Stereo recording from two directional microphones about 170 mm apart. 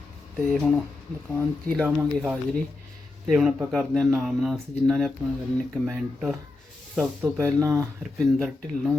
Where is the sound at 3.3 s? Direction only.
5° right (ahead or behind).